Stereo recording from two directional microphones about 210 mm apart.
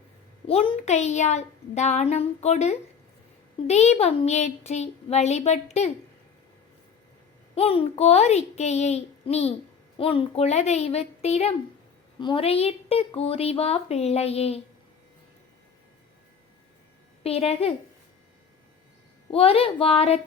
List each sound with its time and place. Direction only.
0.4 s a woman's voice: 30° left (ahead or behind)
7.5 s a woman's voice: 25° left (ahead or behind)
17.2 s a woman's voice: 30° left (ahead or behind)
19.3 s a woman's voice: 25° left (ahead or behind)